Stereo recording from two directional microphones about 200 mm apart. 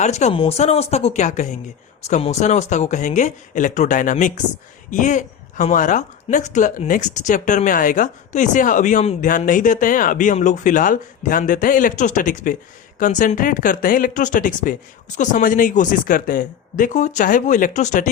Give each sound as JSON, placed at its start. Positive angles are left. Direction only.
{"t": 0.0, "sound": "speech", "side_deg": 35}